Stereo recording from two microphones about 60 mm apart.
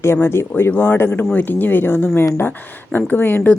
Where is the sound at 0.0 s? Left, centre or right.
Left.